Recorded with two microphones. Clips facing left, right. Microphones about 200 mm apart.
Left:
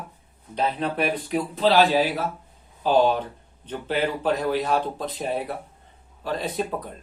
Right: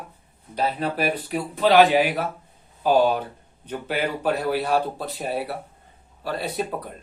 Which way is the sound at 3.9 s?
10° right (ahead or behind).